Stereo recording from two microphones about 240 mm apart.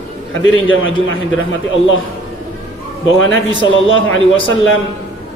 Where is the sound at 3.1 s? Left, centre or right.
Left.